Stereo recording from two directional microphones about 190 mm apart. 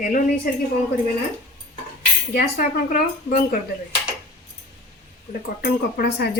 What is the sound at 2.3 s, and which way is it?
Speech, 50° left (ahead or behind).